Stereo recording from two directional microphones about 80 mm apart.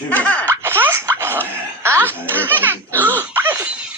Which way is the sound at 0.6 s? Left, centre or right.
Right.